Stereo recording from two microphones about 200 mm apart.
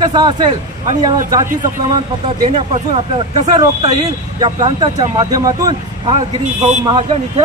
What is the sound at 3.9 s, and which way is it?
Speech, 20° right (ahead or behind).